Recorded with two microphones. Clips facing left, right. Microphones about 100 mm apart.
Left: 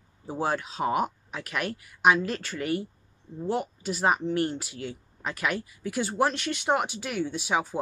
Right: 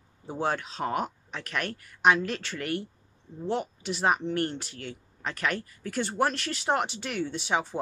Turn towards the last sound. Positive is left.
turn(degrees=5)  # may be behind; listen again after turning